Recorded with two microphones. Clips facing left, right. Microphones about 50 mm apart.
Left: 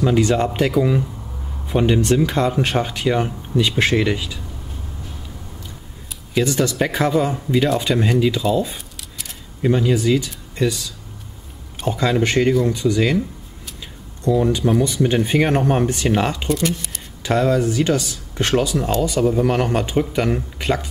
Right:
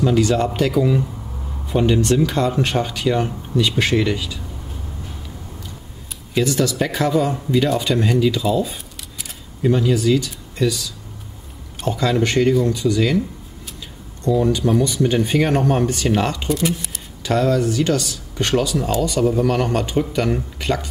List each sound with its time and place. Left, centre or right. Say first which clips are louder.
0.0 s speech: even; centre
6.4 s speech: even; centre
8.4 s a sound: even; centre
9.6 s speech: even; centre
11.8 s speech: even; centre
14.2 s speech: even; centre
16.4 s speech: even; centre
17.2 s speech: even; centre